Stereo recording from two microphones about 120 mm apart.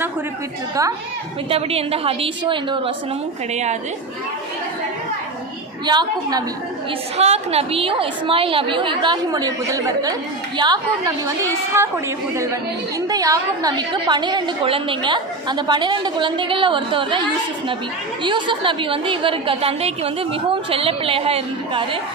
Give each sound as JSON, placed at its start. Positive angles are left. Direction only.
{"t": 1.5, "sound": "a woman's voice", "side_deg": -55}
{"t": 3.5, "sound": "a woman's voice", "side_deg": -70}
{"t": 5.8, "sound": "a woman's voice", "side_deg": -35}
{"t": 7.2, "sound": "a woman's voice", "side_deg": -60}
{"t": 13.1, "sound": "a woman's voice", "side_deg": -30}
{"t": 18.2, "sound": "a woman's voice", "side_deg": -40}